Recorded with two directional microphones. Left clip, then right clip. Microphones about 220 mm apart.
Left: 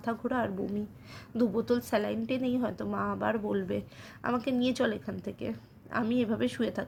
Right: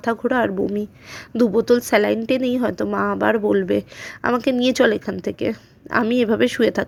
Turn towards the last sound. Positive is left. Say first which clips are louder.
# right 14 dB
turn(degrees=-40)  # may be behind; listen again after turning